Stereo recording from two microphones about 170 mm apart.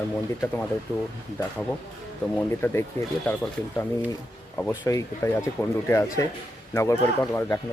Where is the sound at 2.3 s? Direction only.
15° left (ahead or behind).